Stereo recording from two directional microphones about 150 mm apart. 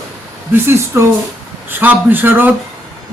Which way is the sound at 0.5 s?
15° right (ahead or behind).